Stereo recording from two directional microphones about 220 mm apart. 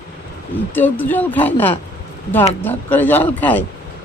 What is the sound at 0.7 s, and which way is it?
Speech, 10° left (ahead or behind).